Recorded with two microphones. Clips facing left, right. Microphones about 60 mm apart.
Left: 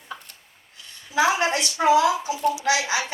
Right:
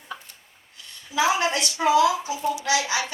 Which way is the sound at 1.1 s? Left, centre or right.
Left.